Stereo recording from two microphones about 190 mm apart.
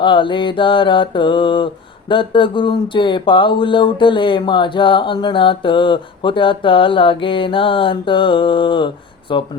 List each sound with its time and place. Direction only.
0.0 s mantra: 25° left (ahead or behind)